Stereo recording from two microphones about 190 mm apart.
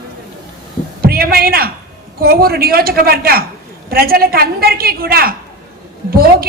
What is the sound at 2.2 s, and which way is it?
A woman's voice, 55° right (ahead or behind).